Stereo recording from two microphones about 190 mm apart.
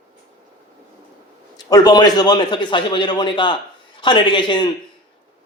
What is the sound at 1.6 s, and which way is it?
A man's voice, 20° left (ahead or behind).